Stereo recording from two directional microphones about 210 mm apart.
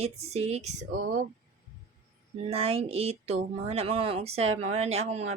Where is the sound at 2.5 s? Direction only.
30° right (ahead or behind).